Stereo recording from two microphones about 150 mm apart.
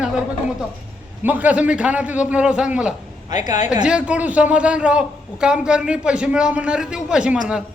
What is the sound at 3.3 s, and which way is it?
Speech, 55° left (ahead or behind).